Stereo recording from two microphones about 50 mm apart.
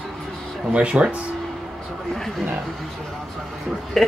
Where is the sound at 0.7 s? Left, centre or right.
Centre.